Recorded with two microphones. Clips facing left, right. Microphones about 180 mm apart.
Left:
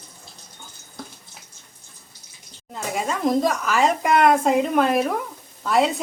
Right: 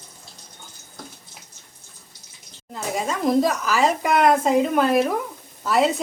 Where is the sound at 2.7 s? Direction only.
Centre (ahead or behind).